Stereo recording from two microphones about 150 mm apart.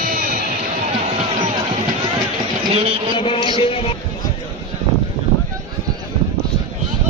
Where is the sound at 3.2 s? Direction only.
35° left (ahead or behind).